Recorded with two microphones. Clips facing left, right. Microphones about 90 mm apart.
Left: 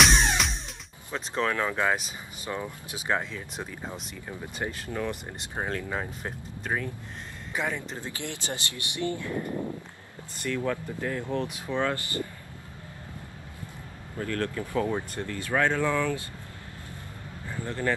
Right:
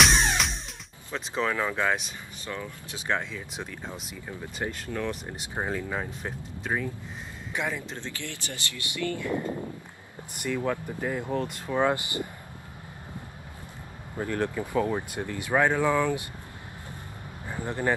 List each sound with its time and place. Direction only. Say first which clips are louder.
0.0 s music: even; centre (ahead or behind)
1.1 s speech: even; centre (ahead or behind)
2.4 s speech: left 3 dB; 15° left (ahead or behind)
3.1 s speech: left 1 dB; 5° left (ahead or behind)
5.4 s speech: right 1 dB; 10° right (ahead or behind)
5.9 s speech: even; centre (ahead or behind)
8.0 s speech: left 2 dB; 20° left (ahead or behind)
10.4 s speech: right 1 dB; 10° right (ahead or behind)
11.4 s speech: even; 5° left (ahead or behind)
11.7 s speech: right 4 dB; 15° right (ahead or behind)
14.1 s speech: right 2 dB; 20° right (ahead or behind)
14.8 s speech: right 1 dB; 5° right (ahead or behind)
15.1 s speech: right 4 dB; 15° right (ahead or behind)
17.5 s speech: right 1 dB; 20° right (ahead or behind)